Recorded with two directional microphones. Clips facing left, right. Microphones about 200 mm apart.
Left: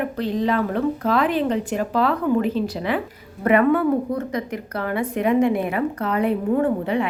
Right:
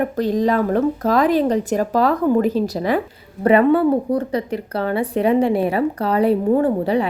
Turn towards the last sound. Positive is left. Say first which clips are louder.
# right 3 dB
turn(degrees=-35)  # may be behind; listen again after turning